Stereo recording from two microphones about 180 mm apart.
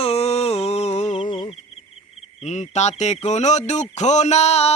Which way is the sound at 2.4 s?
40° left (ahead or behind).